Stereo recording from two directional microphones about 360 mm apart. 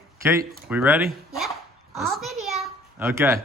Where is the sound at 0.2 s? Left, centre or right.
Centre.